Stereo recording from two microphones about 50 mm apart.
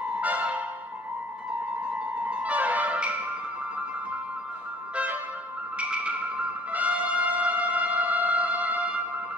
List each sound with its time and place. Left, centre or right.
0.0 s music: right
2.1 s music: right
4.9 s music: right